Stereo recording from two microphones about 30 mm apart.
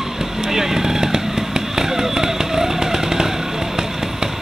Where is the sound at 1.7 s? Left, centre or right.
Centre.